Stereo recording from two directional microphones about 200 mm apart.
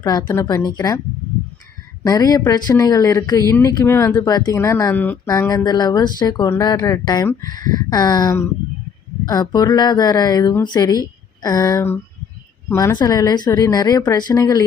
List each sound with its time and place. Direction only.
0.0 s speech: 20° left (ahead or behind)
2.0 s speech: 20° left (ahead or behind)
7.5 s speech: 40° right (ahead or behind)
7.9 s speech: 20° left (ahead or behind)